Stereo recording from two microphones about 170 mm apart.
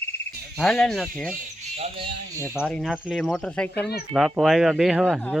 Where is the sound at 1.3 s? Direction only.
40° right (ahead or behind).